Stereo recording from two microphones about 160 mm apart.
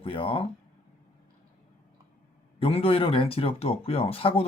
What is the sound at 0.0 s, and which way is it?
Speech, 35° left (ahead or behind).